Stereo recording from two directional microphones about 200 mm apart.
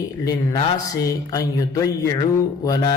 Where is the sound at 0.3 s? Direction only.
15° left (ahead or behind).